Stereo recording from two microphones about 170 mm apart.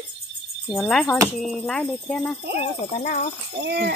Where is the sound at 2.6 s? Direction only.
40° left (ahead or behind).